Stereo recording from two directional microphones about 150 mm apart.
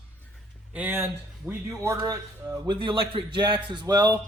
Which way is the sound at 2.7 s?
35° right (ahead or behind).